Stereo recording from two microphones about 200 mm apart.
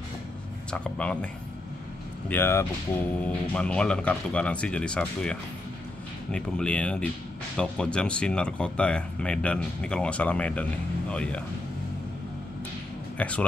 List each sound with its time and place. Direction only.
0.7 s speech: 5° left (ahead or behind)
13.2 s speech: 5° left (ahead or behind)